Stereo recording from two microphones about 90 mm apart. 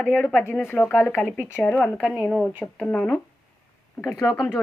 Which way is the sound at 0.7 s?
20° left (ahead or behind).